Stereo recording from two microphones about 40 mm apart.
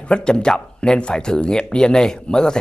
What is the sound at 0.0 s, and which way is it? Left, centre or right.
Speech, left.